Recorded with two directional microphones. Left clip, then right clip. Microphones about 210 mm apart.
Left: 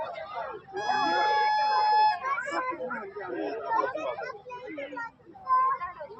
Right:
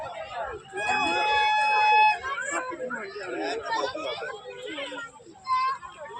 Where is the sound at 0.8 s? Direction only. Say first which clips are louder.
Right 1 dB; 35° right (ahead or behind).